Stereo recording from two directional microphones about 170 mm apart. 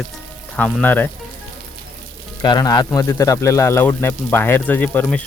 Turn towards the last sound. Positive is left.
turn(degrees=10)  # may be behind; listen again after turning